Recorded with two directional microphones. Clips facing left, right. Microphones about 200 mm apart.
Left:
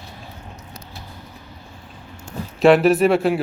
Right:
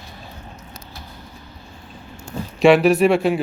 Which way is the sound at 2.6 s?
Centre (ahead or behind).